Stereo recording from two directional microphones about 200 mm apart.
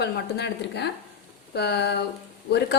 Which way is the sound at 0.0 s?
55° left (ahead or behind).